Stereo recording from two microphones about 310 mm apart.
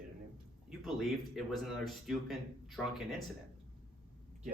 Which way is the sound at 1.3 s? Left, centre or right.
Centre.